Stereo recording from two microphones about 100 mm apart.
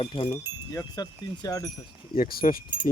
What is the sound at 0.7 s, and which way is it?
Speech, 40° left (ahead or behind).